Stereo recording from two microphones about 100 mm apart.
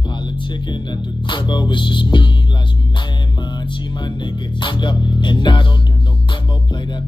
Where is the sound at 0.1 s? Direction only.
50° left (ahead or behind).